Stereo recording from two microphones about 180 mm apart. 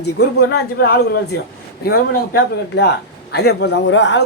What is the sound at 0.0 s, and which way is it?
A man's voice, 65° left (ahead or behind).